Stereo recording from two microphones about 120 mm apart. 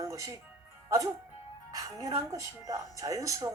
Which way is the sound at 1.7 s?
30° right (ahead or behind).